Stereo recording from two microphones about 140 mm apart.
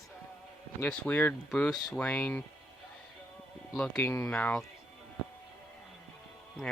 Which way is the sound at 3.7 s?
5° left (ahead or behind).